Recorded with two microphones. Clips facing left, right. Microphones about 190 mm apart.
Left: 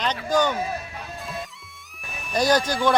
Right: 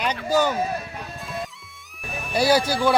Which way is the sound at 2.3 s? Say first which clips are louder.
Right 1 dB; 10° right (ahead or behind).